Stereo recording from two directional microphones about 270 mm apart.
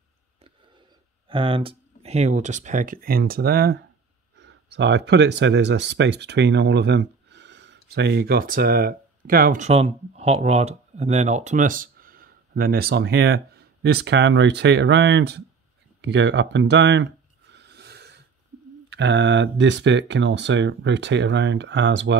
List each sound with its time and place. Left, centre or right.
1.3 s speech: centre; by 15.4 s right
16.0 s a sound: right
18.9 s speech: right